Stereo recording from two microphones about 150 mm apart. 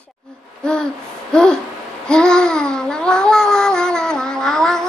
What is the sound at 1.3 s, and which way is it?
Babbling, 5° left (ahead or behind).